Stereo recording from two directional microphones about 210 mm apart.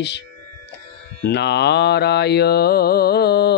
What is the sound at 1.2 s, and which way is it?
Mantra, 55° left (ahead or behind).